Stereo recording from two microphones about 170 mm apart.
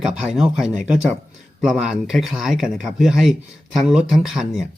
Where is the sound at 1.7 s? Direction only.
5° right (ahead or behind).